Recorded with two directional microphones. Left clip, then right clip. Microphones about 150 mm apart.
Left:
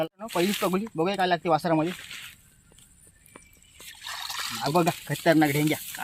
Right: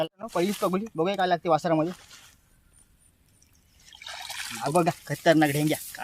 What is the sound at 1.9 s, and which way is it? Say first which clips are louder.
Speech: left 4 dB; 30° right (ahead or behind).